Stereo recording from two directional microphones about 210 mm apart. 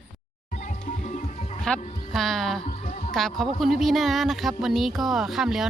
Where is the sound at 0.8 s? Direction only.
35° left (ahead or behind).